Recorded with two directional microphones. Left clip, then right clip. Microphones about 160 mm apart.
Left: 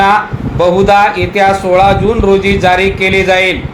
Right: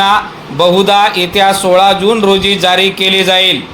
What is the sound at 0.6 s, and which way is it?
Speech, 30° right (ahead or behind).